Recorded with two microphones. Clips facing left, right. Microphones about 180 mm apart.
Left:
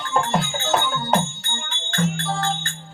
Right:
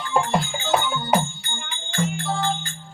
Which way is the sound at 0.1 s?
10° right (ahead or behind).